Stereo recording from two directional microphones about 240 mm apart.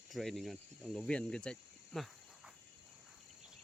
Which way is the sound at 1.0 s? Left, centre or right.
Centre.